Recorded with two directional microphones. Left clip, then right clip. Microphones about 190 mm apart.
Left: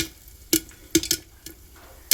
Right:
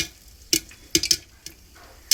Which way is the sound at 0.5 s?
20° left (ahead or behind).